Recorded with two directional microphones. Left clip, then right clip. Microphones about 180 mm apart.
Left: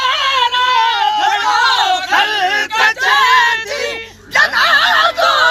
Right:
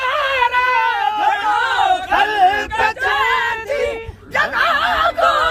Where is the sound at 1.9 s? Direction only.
45° right (ahead or behind).